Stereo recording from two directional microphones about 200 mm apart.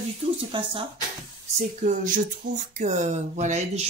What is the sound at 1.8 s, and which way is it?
Speech, 40° right (ahead or behind).